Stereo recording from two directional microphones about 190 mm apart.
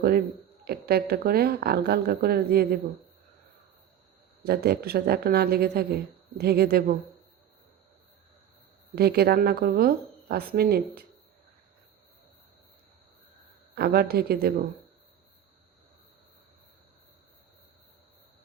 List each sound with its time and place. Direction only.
0.6 s speech: 55° right (ahead or behind)
4.4 s speech: 55° right (ahead or behind)
9.0 s a woman's voice: 55° right (ahead or behind)
13.7 s speech: 55° right (ahead or behind)